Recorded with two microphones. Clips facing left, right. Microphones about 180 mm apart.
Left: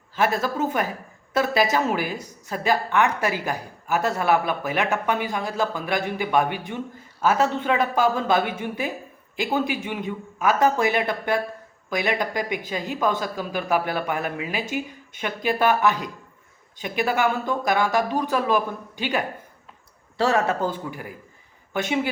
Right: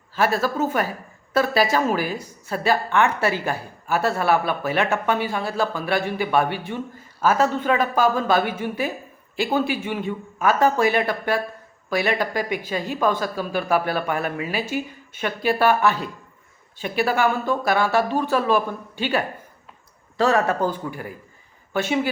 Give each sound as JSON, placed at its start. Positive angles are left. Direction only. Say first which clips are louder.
{"t": 0.2, "sound": "speech", "louder": "right 2 dB", "side_deg": 20}
{"t": 20.2, "sound": "speech", "louder": "right 2 dB", "side_deg": 20}